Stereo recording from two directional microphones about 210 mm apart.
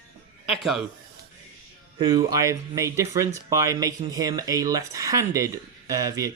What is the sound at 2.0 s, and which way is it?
Speech, 20° right (ahead or behind).